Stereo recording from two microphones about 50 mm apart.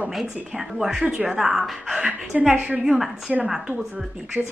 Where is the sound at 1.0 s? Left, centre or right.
Right.